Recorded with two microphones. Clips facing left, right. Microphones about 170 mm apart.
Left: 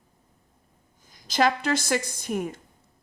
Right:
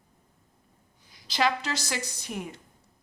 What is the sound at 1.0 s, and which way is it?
A woman's voice, 45° left (ahead or behind).